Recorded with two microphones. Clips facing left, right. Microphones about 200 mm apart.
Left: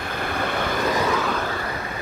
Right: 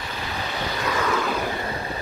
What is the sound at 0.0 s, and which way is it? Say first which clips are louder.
Vehicle: left 5 dB; 55° left (ahead or behind).